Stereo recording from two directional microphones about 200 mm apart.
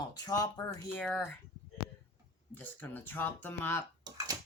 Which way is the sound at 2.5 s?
10° left (ahead or behind).